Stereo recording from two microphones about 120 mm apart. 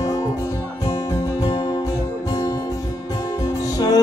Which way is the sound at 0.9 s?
30° left (ahead or behind).